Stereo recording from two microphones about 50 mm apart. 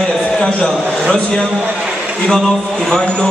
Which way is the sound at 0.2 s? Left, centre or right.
Left.